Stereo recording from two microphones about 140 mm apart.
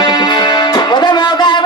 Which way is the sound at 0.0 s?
30° left (ahead or behind).